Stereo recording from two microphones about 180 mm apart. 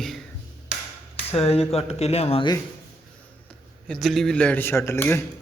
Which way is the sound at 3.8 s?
5° left (ahead or behind).